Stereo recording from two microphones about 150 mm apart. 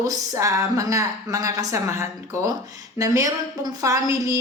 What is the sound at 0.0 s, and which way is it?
A woman's voice, 20° right (ahead or behind).